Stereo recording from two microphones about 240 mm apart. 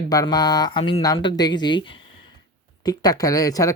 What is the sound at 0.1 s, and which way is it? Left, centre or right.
Speech, centre.